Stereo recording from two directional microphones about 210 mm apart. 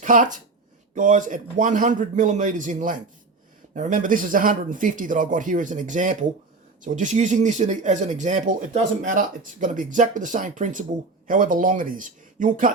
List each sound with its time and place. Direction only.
0.0 s speech: 40° right (ahead or behind)